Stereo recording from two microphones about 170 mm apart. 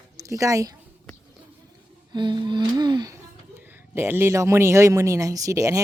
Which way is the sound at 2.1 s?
25° right (ahead or behind).